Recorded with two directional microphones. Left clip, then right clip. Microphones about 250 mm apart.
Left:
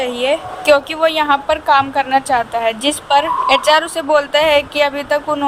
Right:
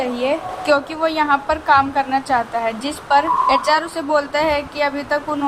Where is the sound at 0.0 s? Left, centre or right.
Left.